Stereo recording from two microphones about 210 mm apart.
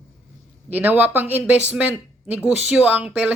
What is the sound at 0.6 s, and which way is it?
Speech, 10° right (ahead or behind).